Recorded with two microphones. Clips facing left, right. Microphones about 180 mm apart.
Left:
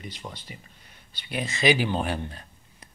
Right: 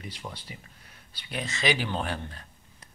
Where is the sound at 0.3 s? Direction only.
5° left (ahead or behind).